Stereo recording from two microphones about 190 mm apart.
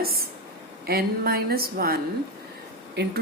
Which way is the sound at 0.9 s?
55° right (ahead or behind).